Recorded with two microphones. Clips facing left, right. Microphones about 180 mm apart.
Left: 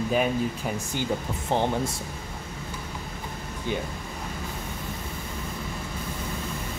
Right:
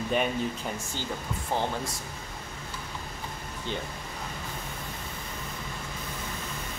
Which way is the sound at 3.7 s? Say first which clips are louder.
Left 5 dB; 10° left (ahead or behind).